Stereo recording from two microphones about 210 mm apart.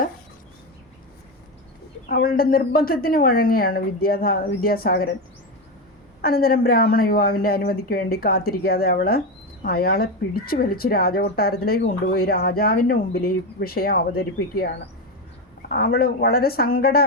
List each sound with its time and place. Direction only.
2.0 s speech: 45° left (ahead or behind)
6.2 s speech: 45° left (ahead or behind)
15.7 s speech: 45° left (ahead or behind)